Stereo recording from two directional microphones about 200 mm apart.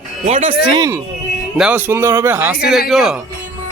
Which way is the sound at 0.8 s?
15° right (ahead or behind).